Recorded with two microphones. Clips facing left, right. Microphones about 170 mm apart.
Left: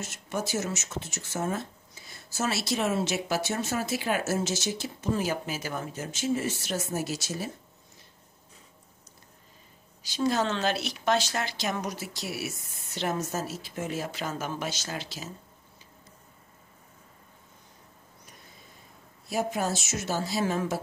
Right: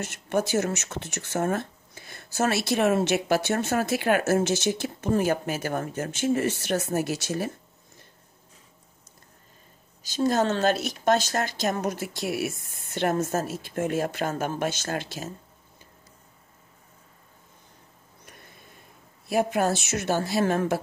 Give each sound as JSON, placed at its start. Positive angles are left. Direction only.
{"t": 0.0, "sound": "speech", "side_deg": -60}
{"t": 10.0, "sound": "speech", "side_deg": -45}
{"t": 19.2, "sound": "speech", "side_deg": -60}